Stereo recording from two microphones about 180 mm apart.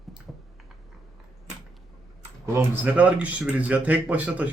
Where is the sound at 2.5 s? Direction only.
10° right (ahead or behind).